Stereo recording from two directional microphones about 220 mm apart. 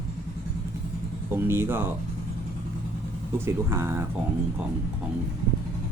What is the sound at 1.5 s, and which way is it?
Speech, 10° right (ahead or behind).